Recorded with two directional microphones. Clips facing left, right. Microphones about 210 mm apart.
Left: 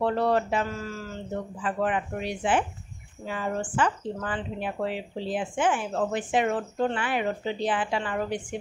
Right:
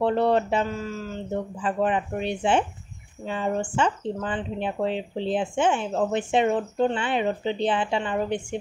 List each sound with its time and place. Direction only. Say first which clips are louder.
0.0 s speech: right 3 dB; 25° right (ahead or behind)